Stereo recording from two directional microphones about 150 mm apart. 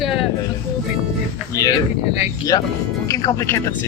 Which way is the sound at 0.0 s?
Centre (ahead or behind).